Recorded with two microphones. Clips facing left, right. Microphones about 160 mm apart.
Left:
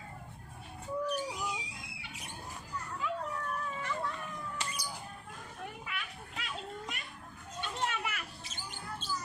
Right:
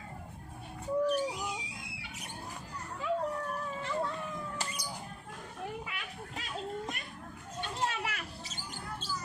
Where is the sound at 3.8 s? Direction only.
30° right (ahead or behind).